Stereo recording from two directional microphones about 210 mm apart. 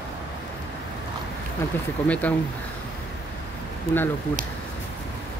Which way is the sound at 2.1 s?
5° left (ahead or behind).